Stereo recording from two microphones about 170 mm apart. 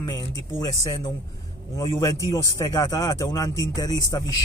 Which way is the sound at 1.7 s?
20° left (ahead or behind).